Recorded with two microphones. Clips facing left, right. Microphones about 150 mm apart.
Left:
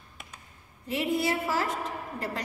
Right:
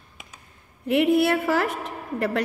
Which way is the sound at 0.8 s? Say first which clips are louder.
Right 9 dB; 65° right (ahead or behind).